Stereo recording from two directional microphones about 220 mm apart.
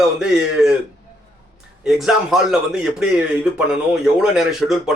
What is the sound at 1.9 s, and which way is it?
A man's voice, centre (ahead or behind).